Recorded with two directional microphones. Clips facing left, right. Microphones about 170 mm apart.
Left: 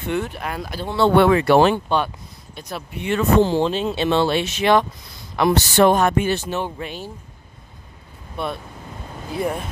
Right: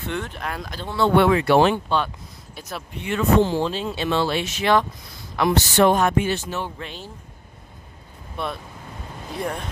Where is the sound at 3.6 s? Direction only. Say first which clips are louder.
Left 4 dB; 20° left (ahead or behind).